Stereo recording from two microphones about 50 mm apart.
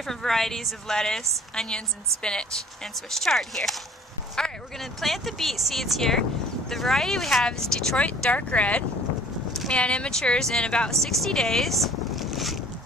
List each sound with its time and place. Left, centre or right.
0.0 s a woman's voice: centre
8.3 s speech: left
10.9 s speech: centre